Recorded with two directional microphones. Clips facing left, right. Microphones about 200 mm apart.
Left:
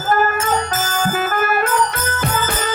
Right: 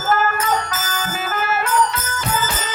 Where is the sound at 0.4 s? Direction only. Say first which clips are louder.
Left 2 dB; 50° left (ahead or behind).